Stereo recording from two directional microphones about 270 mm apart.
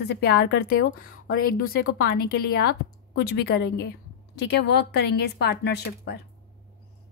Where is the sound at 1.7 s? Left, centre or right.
Left.